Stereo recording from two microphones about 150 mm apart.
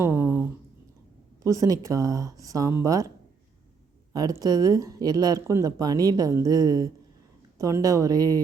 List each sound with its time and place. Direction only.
0.0 s a sound: 15° right (ahead or behind)
1.5 s speech: 25° right (ahead or behind)
4.1 s speech: 25° right (ahead or behind)